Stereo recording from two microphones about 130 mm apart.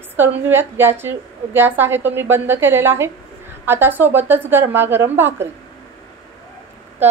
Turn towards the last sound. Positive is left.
turn(degrees=-20)  # may be behind; listen again after turning